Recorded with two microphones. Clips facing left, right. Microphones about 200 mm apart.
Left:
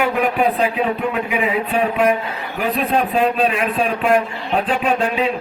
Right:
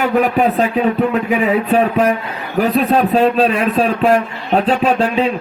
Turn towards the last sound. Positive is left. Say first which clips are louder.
# right 4 dB
turn(degrees=-40)  # may be behind; listen again after turning